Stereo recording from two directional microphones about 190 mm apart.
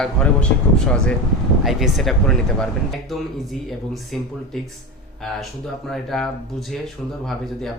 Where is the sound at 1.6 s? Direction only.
Centre (ahead or behind).